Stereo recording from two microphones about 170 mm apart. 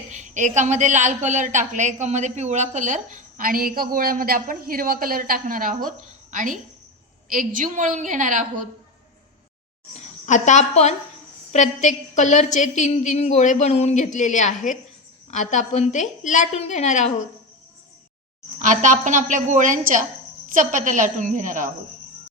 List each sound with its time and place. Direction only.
0.1 s a woman's voice: 45° right (ahead or behind)
9.9 s a woman's voice: 45° left (ahead or behind)
18.6 s a woman's voice: 50° right (ahead or behind)